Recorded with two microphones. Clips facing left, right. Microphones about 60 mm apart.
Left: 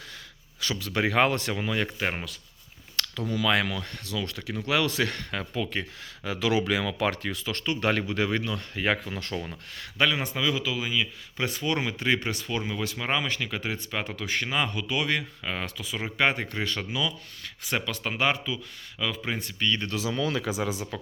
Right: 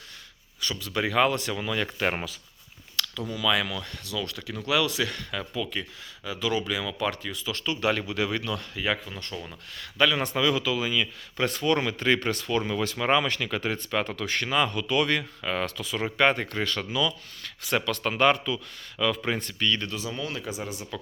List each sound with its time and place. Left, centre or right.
0.7 s speech: left
0.9 s speech: left
1.5 s speech: left
2.9 s speech: left
6.2 s speech: left
7.6 s speech: left
9.1 s speech: left
10.2 s speech: centre
19.9 s speech: left
20.9 s speech: left